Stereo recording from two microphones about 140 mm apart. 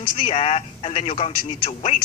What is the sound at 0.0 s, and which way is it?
A man's voice, 40° left (ahead or behind).